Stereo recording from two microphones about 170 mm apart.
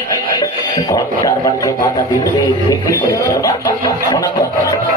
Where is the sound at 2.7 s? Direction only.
20° left (ahead or behind).